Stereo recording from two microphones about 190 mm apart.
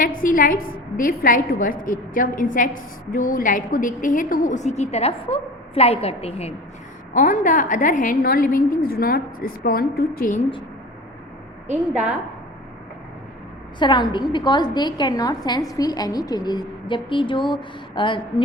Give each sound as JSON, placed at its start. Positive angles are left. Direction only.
{"t": 0.0, "sound": "a woman's voice", "side_deg": 45}
{"t": 7.1, "sound": "a woman's voice", "side_deg": 45}
{"t": 13.7, "sound": "a woman's voice", "side_deg": 25}